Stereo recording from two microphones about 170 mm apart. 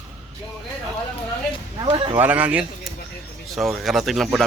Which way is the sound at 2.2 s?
10° right (ahead or behind).